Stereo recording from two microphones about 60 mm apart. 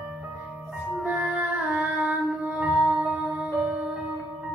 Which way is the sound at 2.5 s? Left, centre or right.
Right.